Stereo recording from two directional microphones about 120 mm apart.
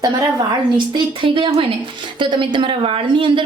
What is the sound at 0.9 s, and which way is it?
A woman's voice, 45° right (ahead or behind).